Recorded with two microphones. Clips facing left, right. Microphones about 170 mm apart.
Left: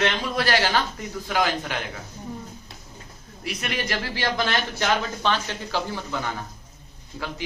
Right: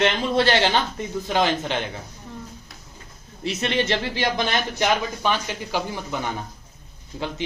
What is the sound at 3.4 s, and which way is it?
Speech, 25° right (ahead or behind).